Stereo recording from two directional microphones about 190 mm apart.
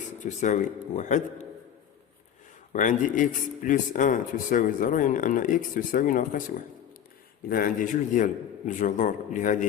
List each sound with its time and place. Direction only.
0.2 s a man's voice: 40° left (ahead or behind)
2.7 s speech: 45° left (ahead or behind)